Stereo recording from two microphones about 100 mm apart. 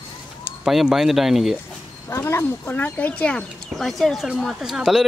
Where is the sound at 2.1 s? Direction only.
30° left (ahead or behind); by 3.5 s 10° left (ahead or behind).